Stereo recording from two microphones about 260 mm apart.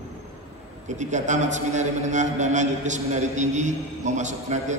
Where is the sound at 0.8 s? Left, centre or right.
Right.